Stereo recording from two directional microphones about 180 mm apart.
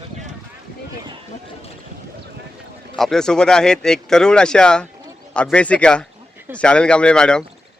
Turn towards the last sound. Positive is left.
turn(degrees=5)  # may be behind; listen again after turning